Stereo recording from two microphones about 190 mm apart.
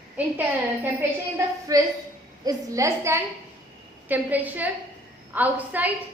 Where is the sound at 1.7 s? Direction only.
20° right (ahead or behind).